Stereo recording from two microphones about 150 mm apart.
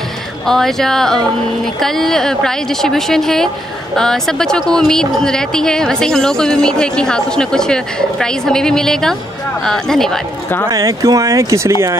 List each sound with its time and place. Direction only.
0.5 s speech: centre (ahead or behind)
10.7 s speech: 25° right (ahead or behind)